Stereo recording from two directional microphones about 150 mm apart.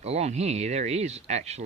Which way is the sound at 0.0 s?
45° right (ahead or behind).